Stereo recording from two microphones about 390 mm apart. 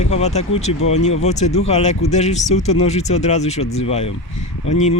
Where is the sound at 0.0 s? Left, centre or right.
Centre.